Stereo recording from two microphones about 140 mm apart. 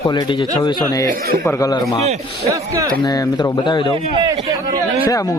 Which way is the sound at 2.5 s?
20° right (ahead or behind).